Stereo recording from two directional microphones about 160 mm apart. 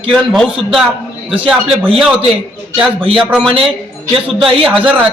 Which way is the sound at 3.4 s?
35° right (ahead or behind).